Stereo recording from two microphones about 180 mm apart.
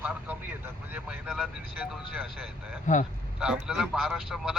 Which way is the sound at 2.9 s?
45° left (ahead or behind).